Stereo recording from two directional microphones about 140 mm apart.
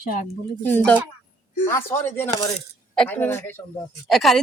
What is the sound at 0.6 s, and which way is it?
Speech, 15° left (ahead or behind).